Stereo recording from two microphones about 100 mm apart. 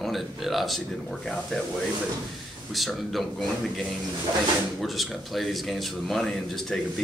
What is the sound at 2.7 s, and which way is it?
Speech, centre (ahead or behind).